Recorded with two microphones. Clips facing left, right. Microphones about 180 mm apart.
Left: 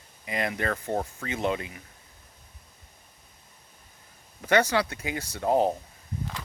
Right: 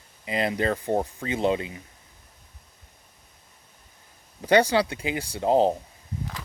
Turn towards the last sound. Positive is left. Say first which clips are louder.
# right 3 dB
turn(degrees=-25)  # may be behind; listen again after turning